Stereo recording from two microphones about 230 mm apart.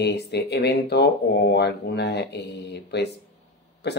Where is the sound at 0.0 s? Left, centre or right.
Left.